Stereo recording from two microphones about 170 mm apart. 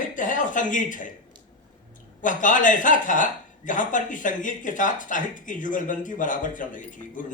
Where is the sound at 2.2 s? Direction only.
50° left (ahead or behind).